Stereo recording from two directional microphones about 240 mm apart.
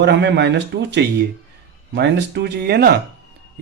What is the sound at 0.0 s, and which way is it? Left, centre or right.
A man's voice, right.